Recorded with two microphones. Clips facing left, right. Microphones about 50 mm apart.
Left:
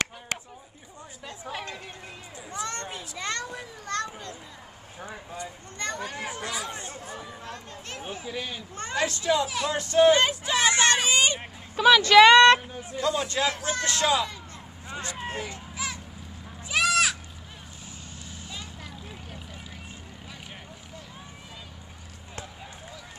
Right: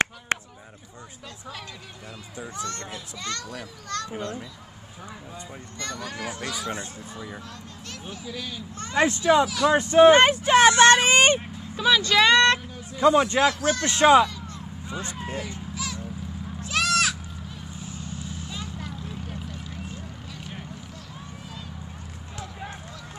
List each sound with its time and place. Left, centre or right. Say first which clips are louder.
0.3 s chop: right 6 dB; right
1.4 s a sound: left 4 dB; left
2.5 s children playing: left 2 dB; left
5.4 s speech: left 3 dB; left
8.9 s a man's voice: right 6 dB; right
10.1 s speech: right 7 dB; right
11.7 s speech: left 5 dB; left
13.0 s a man's voice: right 8 dB; right
15.2 s speech: left 1 dB; left
15.7 s a sound: even; left
16.6 s sheep: even; centre
18.5 s vehicle: right 5 dB; centre